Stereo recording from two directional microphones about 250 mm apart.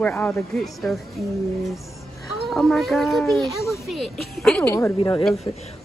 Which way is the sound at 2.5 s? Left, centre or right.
Centre.